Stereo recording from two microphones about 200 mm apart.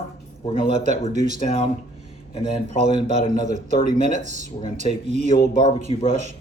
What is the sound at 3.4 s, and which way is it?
Speech, 35° right (ahead or behind).